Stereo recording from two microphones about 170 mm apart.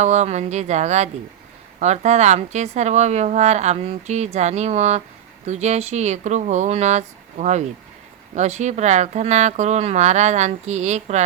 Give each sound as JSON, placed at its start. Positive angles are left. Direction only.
{"t": 0.0, "sound": "a woman's voice", "side_deg": -40}